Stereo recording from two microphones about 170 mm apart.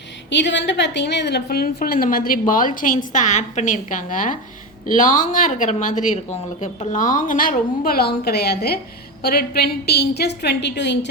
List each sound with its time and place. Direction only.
0.3 s a woman's voice: 90° left